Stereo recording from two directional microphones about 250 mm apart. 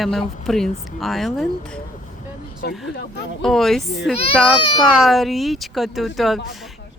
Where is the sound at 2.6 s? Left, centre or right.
Left.